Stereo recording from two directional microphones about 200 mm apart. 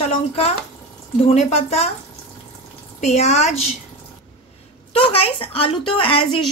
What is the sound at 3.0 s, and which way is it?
Speech, 35° left (ahead or behind).